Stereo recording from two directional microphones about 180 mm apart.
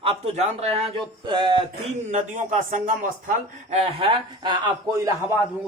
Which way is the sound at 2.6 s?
45° right (ahead or behind).